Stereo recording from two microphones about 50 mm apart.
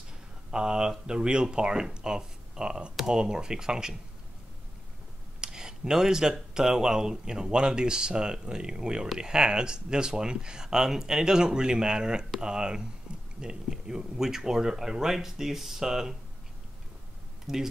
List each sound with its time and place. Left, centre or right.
0.5 s speech: centre
5.4 s speech: centre
17.5 s speech: centre